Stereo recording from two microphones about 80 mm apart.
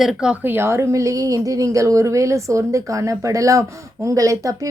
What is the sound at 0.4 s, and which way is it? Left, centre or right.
Speech, right.